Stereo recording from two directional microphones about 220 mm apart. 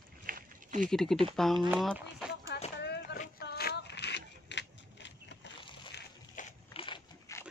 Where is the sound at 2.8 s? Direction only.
50° left (ahead or behind).